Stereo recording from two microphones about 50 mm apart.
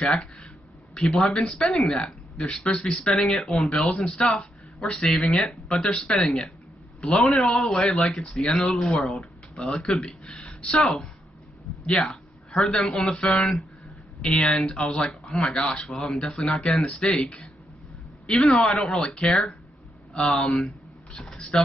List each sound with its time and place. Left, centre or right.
0.0 s speech: centre
2.3 s speech: centre
10.8 s a man's voice: centre
14.2 s speech: centre
15.8 s speech: centre
18.6 s speech: centre
20.4 s speech: centre
21.1 s a sound: centre